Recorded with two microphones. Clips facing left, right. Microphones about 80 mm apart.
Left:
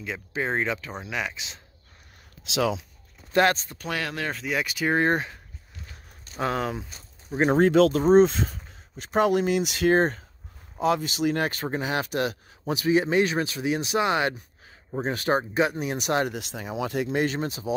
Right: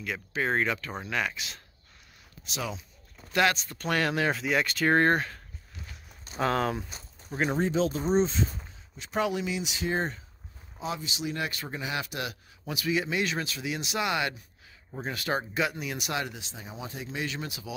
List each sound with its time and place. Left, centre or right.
0.0 s speech: left
2.4 s speech: left
3.3 s speech: left
3.7 s speech: centre
6.4 s speech: centre
7.5 s speech: left
16.3 s speech: left